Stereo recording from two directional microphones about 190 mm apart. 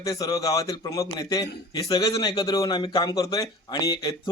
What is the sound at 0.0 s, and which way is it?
A man's voice, 20° left (ahead or behind).